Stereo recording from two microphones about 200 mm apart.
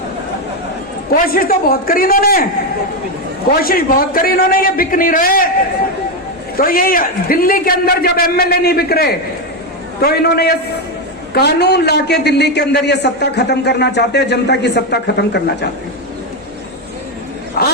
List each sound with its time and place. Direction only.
1.1 s a man's voice: 45° left (ahead or behind)
3.6 s a man's voice: 45° left (ahead or behind)
6.6 s a man's voice: 45° left (ahead or behind)
17.6 s a man's voice: 50° left (ahead or behind)